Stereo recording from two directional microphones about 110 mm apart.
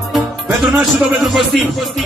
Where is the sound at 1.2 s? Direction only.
Centre (ahead or behind).